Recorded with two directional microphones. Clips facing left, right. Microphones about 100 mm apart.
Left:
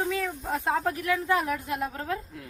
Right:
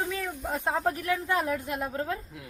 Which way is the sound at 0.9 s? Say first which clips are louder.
Left 1 dB; 30° right (ahead or behind).